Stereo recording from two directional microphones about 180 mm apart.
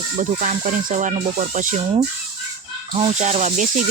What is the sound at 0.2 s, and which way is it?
Speech, 45° right (ahead or behind).